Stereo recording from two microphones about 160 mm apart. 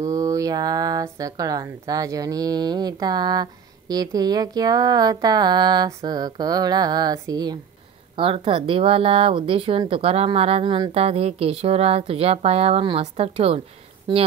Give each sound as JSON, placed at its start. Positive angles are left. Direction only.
{"t": 0.0, "sound": "speech", "side_deg": -20}
{"t": 14.1, "sound": "speech", "side_deg": -25}